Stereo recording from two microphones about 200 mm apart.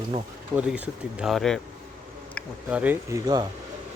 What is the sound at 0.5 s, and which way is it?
Speech, 5° right (ahead or behind).